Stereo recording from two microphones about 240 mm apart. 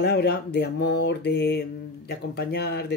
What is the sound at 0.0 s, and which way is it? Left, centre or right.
Speech, left.